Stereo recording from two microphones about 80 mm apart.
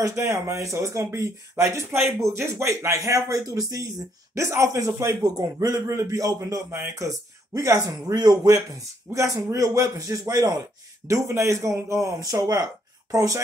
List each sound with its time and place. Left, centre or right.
0.0 s a man's voice: right
11.1 s a man's voice: right